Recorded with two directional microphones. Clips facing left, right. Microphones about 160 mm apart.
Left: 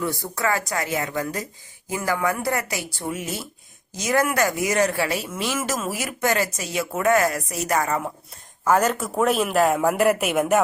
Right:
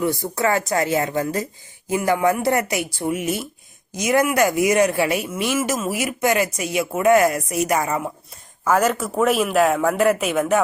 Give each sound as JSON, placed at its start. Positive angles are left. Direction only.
{"t": 0.0, "sound": "speech", "side_deg": -20}
{"t": 8.6, "sound": "speech", "side_deg": 0}